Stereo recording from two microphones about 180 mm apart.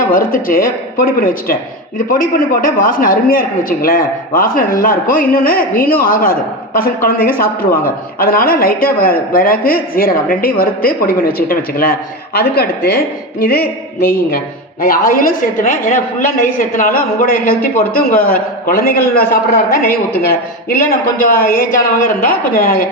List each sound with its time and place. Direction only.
0.0 s a woman's voice: 50° left (ahead or behind)
14.8 s a woman's voice: 55° left (ahead or behind)